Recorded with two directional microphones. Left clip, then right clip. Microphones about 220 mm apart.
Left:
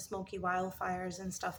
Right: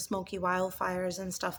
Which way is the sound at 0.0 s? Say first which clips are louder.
Right 5 dB; 50° right (ahead or behind).